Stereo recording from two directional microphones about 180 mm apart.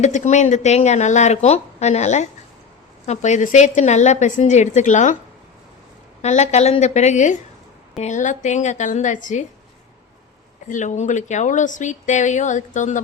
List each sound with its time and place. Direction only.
0.0 s speech: 40° left (ahead or behind)
6.2 s a woman's voice: 40° left (ahead or behind)
10.7 s a woman's voice: 40° left (ahead or behind)